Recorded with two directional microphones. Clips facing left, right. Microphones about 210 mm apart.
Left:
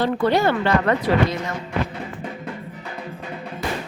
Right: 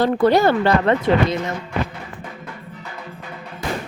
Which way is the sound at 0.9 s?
25° right (ahead or behind).